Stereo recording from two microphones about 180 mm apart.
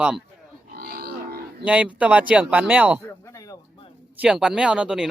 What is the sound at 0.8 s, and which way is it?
Cattle, 55° right (ahead or behind).